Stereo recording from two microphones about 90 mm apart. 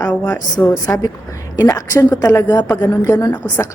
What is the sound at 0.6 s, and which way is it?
Speech, 20° left (ahead or behind).